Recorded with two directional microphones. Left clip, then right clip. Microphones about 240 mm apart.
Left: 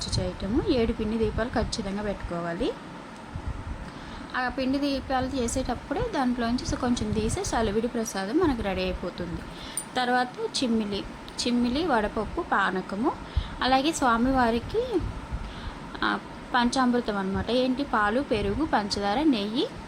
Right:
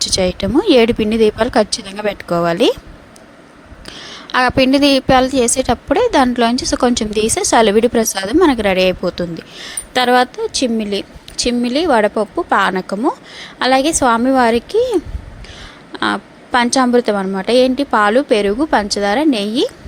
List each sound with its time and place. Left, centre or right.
0.0 s a woman's voice: right
4.3 s a woman's voice: right